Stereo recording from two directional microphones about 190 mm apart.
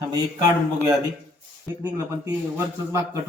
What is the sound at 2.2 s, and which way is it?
Speech, 15° right (ahead or behind).